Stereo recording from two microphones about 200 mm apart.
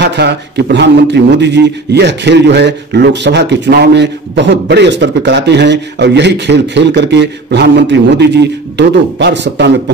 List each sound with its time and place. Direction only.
0.0 s speech: 55° right (ahead or behind)